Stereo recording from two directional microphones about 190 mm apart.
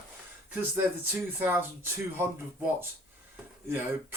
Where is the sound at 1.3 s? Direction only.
10° right (ahead or behind).